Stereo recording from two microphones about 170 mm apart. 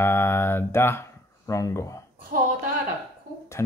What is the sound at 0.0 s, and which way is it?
Speech, 15° left (ahead or behind).